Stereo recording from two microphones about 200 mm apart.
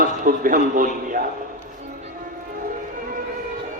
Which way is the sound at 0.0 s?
45° right (ahead or behind).